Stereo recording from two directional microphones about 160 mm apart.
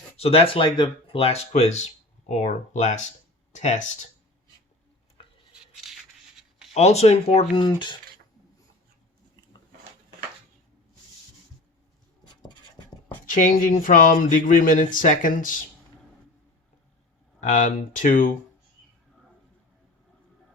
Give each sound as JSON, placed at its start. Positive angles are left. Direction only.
{"t": 0.2, "sound": "speech", "side_deg": 40}
{"t": 5.7, "sound": "a sound", "side_deg": 0}
{"t": 6.7, "sound": "speech", "side_deg": 40}
{"t": 7.5, "sound": "speech", "side_deg": 30}
{"t": 13.3, "sound": "speech", "side_deg": 55}
{"t": 17.4, "sound": "speech", "side_deg": 50}